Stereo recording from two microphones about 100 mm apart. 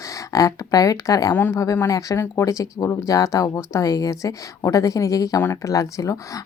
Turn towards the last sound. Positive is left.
turn(degrees=35)  # may be behind; listen again after turning